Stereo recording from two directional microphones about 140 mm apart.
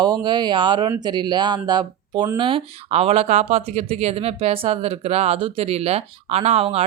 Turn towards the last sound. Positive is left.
turn(degrees=-50)  # may be behind; listen again after turning